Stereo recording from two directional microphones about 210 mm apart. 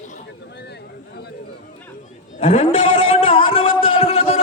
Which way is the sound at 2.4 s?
25° left (ahead or behind).